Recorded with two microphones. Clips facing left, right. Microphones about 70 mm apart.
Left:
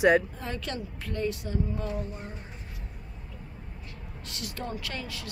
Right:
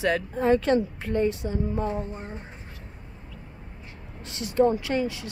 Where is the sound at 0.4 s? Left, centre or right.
Right.